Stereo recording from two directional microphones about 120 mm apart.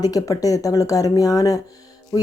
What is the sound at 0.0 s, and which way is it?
A woman's voice, 30° left (ahead or behind).